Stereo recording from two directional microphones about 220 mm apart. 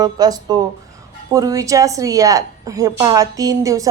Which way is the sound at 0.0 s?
15° right (ahead or behind).